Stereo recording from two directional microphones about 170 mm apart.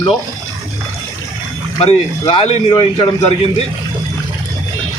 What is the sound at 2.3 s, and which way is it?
Speech, 30° left (ahead or behind).